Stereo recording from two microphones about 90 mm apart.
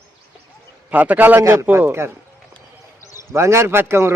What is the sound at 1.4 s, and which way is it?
Speech, 30° right (ahead or behind).